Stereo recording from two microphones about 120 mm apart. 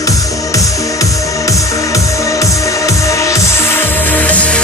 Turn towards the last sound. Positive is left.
turn(degrees=10)  # may be behind; listen again after turning